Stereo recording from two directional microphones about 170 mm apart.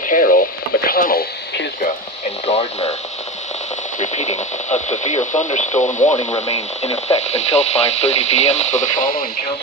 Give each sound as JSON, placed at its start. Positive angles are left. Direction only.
{"t": 0.1, "sound": "radio", "side_deg": 55}
{"t": 2.5, "sound": "radio", "side_deg": 40}
{"t": 4.0, "sound": "radio", "side_deg": 40}
{"t": 6.5, "sound": "speech", "side_deg": 40}